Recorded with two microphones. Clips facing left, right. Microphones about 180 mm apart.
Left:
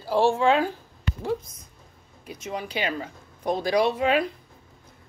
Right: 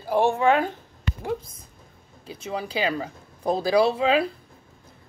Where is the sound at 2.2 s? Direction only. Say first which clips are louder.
Right 2 dB; 30° right (ahead or behind).